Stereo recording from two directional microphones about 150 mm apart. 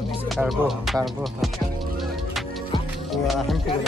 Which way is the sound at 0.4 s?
Centre (ahead or behind).